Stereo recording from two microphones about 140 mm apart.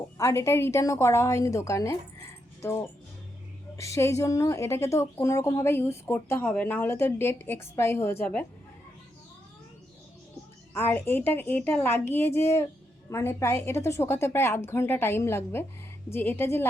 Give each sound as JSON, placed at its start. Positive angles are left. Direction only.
{"t": 0.2, "sound": "a woman's voice", "side_deg": 20}
{"t": 10.8, "sound": "a woman's voice", "side_deg": 15}